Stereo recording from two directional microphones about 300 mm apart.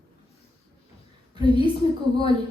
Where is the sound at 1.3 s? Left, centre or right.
Centre.